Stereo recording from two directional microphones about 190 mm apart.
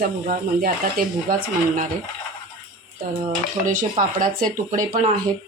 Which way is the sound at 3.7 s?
45° right (ahead or behind).